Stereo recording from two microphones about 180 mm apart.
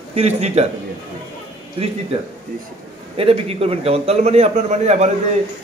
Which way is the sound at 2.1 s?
35° right (ahead or behind).